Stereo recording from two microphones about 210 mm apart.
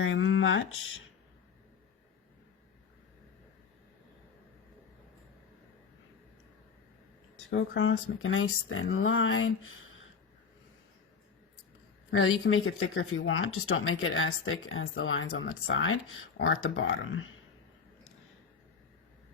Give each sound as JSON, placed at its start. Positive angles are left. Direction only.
{"t": 0.0, "sound": "speech", "side_deg": 70}
{"t": 7.5, "sound": "speech", "side_deg": 65}
{"t": 12.1, "sound": "speech", "side_deg": 70}